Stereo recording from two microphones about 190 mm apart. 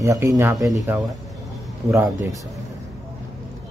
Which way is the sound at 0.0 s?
15° right (ahead or behind).